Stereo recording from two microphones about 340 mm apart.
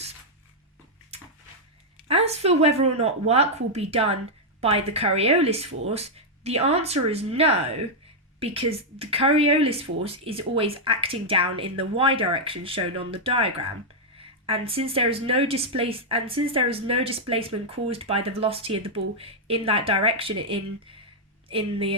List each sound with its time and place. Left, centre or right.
2.0 s speech: centre